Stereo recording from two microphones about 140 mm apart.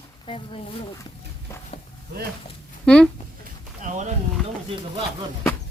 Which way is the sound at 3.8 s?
60° right (ahead or behind).